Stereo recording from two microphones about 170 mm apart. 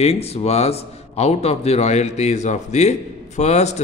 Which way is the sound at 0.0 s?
35° left (ahead or behind).